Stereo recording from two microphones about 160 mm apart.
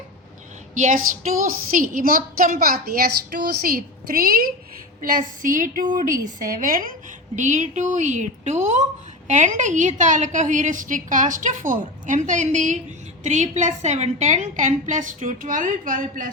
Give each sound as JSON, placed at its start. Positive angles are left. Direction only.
{"t": 0.7, "sound": "a woman's voice", "side_deg": -50}
{"t": 7.3, "sound": "a woman's voice", "side_deg": -50}